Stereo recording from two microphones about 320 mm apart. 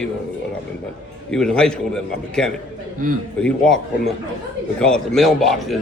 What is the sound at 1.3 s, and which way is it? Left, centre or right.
A man's voice, centre.